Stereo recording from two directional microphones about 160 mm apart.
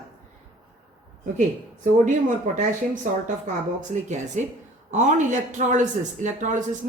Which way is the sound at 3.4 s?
50° right (ahead or behind).